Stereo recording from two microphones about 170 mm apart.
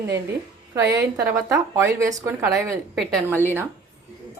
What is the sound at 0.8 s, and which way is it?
Speech, 90° right.